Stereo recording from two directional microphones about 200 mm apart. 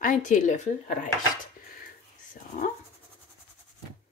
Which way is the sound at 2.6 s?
40° left (ahead or behind).